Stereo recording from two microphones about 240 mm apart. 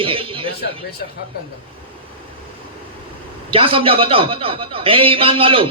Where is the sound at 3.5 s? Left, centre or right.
Right.